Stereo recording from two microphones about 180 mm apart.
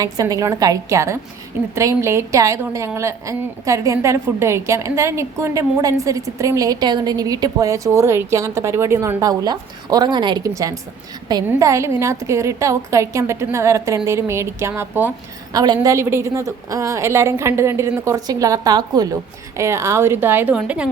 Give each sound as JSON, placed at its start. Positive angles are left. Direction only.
{"t": 0.0, "sound": "a woman's voice", "side_deg": -20}
{"t": 15.5, "sound": "a woman's voice", "side_deg": -20}